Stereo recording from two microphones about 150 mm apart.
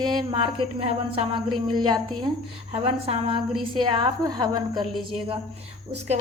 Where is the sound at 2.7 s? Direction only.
40° right (ahead or behind).